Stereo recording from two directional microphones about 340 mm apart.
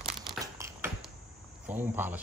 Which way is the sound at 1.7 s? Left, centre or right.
Centre.